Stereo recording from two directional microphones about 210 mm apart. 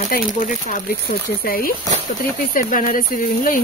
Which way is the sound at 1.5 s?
45° left (ahead or behind).